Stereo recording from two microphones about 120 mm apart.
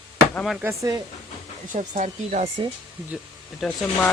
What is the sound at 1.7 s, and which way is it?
Speech, 90° right.